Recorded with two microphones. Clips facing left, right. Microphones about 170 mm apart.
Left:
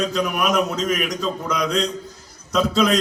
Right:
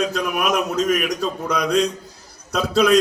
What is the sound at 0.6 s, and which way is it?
Speech, 45° right (ahead or behind).